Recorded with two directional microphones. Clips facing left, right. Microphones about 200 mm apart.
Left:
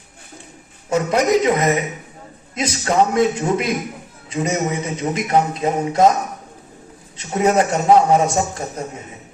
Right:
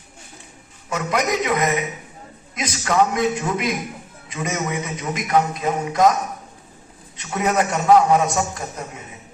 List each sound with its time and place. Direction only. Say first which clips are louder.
0.9 s a man's voice: left 6 dB; 30° left (ahead or behind)
7.2 s a man's voice: left 4 dB; 30° left (ahead or behind)